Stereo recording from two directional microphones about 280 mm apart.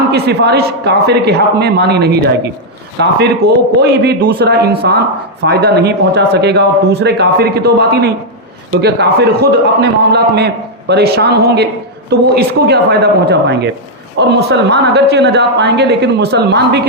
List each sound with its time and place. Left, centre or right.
0.1 s a man's voice: right